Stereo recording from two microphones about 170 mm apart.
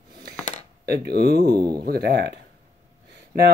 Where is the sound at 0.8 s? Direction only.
65° right (ahead or behind).